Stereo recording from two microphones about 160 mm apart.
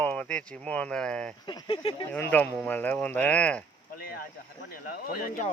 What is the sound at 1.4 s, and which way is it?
Speech, 30° left (ahead or behind).